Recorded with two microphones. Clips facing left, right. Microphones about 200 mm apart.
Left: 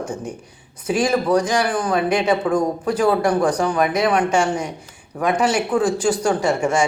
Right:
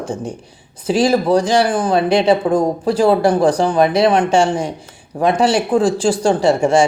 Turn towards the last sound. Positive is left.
turn(degrees=-30)  # may be behind; listen again after turning